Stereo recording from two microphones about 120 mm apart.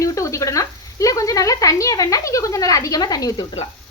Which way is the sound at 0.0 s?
25° left (ahead or behind).